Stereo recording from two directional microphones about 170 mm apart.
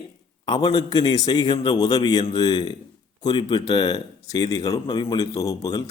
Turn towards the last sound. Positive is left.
turn(degrees=20)  # may be behind; listen again after turning